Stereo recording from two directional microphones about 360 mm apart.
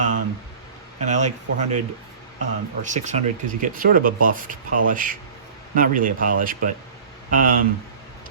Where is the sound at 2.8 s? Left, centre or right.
Centre.